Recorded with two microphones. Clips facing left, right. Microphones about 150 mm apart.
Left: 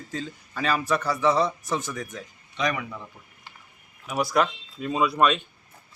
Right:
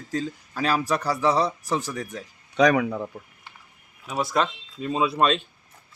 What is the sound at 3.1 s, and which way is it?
Speech, 70° right (ahead or behind).